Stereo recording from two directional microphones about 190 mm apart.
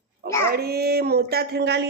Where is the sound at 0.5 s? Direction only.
55° right (ahead or behind).